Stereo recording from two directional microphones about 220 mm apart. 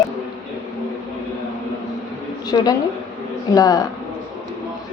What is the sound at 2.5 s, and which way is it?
A woman's voice, 20° left (ahead or behind).